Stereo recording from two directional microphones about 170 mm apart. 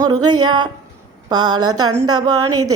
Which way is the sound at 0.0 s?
25° right (ahead or behind).